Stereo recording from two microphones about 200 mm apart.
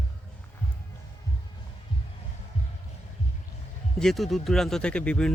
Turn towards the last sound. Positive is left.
turn(degrees=5)  # may be behind; listen again after turning